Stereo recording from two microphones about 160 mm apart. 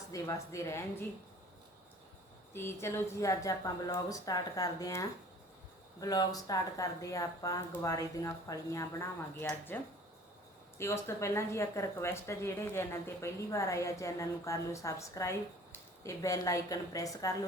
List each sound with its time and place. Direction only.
0.1 s speech: 20° left (ahead or behind)
2.5 s speech: 15° left (ahead or behind)